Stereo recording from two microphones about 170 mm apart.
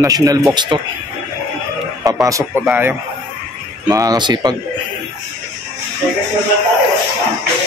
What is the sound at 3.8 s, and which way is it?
Speech, 20° right (ahead or behind).